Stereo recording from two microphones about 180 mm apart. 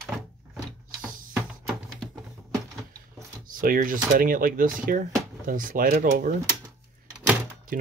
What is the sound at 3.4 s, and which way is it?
Speech, 50° right (ahead or behind).